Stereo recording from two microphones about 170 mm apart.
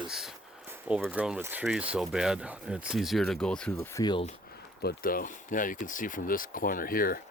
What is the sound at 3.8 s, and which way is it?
Speech, 20° left (ahead or behind).